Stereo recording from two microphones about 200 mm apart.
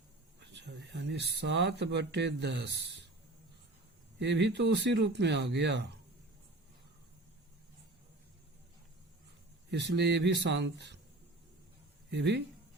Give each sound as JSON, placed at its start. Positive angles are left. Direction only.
{"t": 0.3, "sound": "speech", "side_deg": -60}
{"t": 4.2, "sound": "speech", "side_deg": -60}
{"t": 9.7, "sound": "speech", "side_deg": -60}
{"t": 12.1, "sound": "speech", "side_deg": -60}